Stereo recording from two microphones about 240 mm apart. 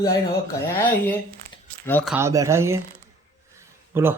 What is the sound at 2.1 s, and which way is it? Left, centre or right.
Speech, centre.